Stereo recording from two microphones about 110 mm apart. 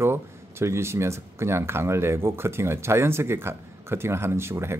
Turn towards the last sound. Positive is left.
turn(degrees=-25)  # may be behind; listen again after turning